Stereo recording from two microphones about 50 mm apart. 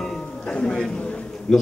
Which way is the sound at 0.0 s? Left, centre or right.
Left.